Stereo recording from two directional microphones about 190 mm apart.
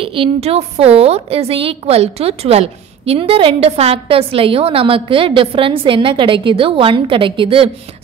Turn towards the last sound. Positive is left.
turn(degrees=-30)  # may be behind; listen again after turning